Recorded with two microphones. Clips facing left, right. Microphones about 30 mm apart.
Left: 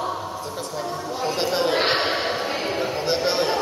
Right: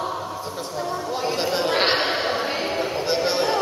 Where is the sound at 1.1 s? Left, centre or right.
Centre.